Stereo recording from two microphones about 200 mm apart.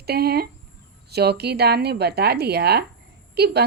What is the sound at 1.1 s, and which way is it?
Speech, 55° right (ahead or behind).